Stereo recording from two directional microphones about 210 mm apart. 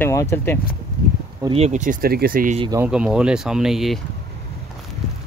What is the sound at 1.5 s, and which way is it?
Speech, 30° right (ahead or behind).